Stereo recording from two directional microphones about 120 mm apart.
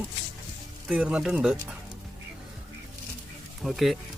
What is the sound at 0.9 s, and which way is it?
Music, 10° right (ahead or behind).